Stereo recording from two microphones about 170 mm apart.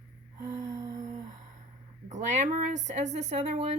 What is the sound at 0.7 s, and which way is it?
Humming, 20° right (ahead or behind).